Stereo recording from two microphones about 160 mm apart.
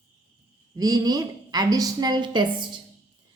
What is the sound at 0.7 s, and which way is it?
A woman's voice, 25° right (ahead or behind).